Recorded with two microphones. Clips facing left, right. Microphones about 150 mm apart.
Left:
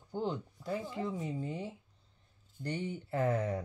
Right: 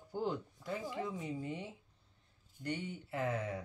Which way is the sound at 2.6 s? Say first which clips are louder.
Left 3 dB; 35° left (ahead or behind).